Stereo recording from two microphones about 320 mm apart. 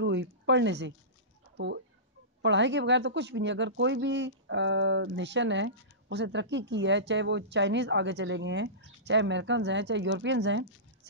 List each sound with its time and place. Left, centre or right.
0.0 s speech: right
2.4 s speech: right